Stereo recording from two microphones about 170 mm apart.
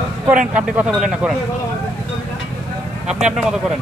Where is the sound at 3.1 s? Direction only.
5° right (ahead or behind).